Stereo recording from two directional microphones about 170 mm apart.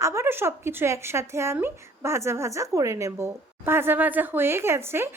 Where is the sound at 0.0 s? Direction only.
15° right (ahead or behind).